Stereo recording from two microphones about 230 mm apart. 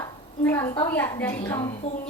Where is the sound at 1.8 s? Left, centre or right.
Left.